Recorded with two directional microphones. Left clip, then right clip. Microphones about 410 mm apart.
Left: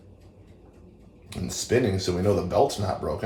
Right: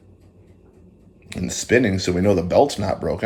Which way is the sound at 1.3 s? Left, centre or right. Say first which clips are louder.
Right 6 dB; centre.